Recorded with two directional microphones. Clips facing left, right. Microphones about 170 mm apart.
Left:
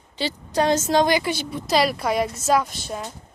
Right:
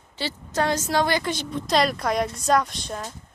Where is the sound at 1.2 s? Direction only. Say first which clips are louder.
Left 1 dB; 10° left (ahead or behind).